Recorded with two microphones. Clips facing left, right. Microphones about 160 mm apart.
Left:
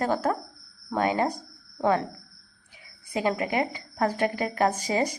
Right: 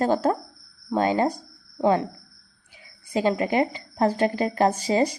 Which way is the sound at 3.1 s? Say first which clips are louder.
Right 4 dB; 30° right (ahead or behind).